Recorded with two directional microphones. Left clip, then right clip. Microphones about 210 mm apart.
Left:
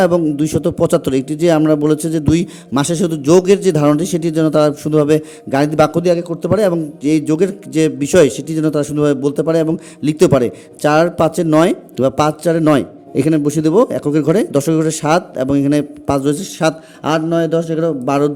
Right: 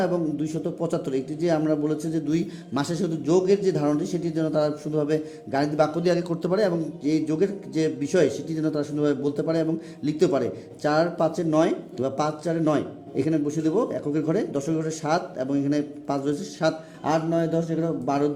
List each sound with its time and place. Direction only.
0.0 s a man's voice: 45° left (ahead or behind)